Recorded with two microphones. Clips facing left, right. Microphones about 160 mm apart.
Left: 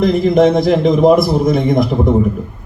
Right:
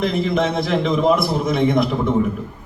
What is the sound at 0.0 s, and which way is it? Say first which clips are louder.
Speech: left 8 dB; 40° left (ahead or behind).